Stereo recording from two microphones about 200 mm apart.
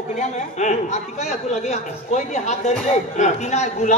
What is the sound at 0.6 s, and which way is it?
Speech, 35° left (ahead or behind).